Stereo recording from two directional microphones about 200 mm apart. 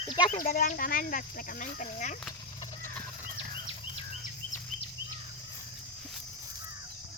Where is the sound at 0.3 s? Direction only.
45° left (ahead or behind).